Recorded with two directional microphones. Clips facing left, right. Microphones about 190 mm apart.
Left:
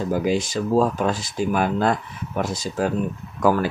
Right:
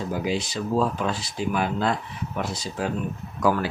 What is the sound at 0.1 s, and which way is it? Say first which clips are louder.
Speech: left 6 dB; 50° left (ahead or behind).